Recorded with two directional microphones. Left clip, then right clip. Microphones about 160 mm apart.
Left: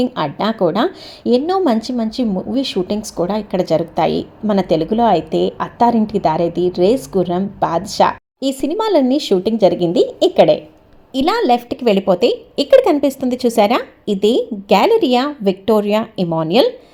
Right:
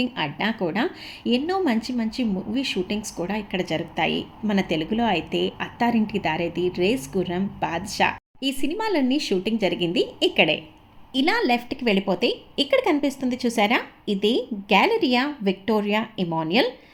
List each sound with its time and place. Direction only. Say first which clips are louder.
0.0 s a woman's voice: left 7 dB; 25° left (ahead or behind)